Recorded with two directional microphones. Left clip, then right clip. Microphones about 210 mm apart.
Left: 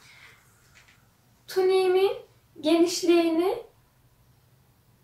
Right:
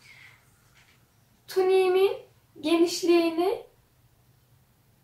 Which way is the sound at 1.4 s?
Centre (ahead or behind).